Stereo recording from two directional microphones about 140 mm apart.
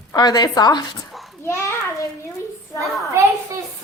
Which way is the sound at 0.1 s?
30° left (ahead or behind).